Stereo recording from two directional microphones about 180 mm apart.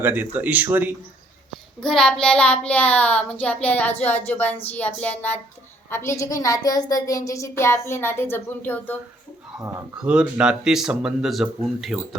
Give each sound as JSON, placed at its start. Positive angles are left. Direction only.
{"t": 0.0, "sound": "speech", "side_deg": -10}
{"t": 1.8, "sound": "a woman's voice", "side_deg": 5}
{"t": 10.0, "sound": "speech", "side_deg": -5}